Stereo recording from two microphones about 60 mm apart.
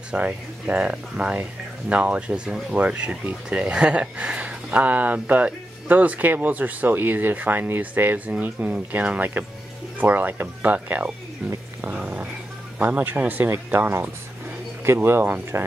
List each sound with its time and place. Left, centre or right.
0.1 s speech: centre
11.8 s a sound: right
12.7 s speech: right